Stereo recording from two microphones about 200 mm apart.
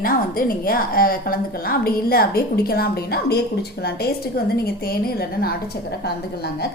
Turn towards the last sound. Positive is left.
turn(degrees=55)  # may be behind; listen again after turning